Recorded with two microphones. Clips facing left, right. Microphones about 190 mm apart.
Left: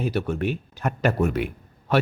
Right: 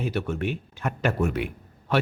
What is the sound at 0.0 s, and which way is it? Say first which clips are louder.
Speech: left 3 dB; 35° left (ahead or behind).